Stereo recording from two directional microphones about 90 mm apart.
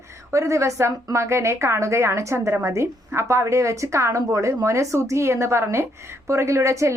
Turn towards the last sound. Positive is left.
turn(degrees=-35)  # may be behind; listen again after turning